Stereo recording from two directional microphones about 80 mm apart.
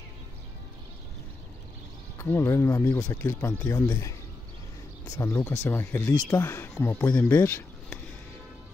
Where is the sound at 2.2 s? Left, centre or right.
Left.